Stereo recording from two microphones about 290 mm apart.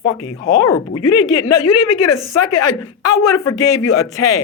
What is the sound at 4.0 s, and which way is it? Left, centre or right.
Speech, centre.